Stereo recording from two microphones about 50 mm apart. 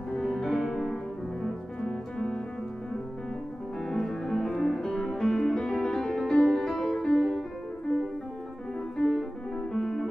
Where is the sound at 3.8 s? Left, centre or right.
Centre.